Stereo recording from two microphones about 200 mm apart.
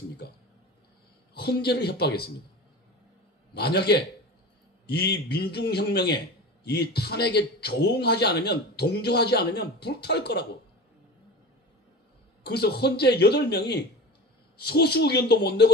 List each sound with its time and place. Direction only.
1.3 s a man's voice: 55° left (ahead or behind)
3.5 s a man's voice: 55° left (ahead or behind)
12.4 s speech: 55° left (ahead or behind)